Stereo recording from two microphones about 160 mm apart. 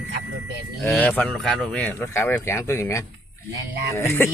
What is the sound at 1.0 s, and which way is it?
Speech, 10° left (ahead or behind).